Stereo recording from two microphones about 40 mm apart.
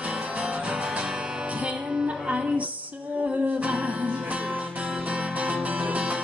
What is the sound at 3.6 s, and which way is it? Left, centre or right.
Music, right.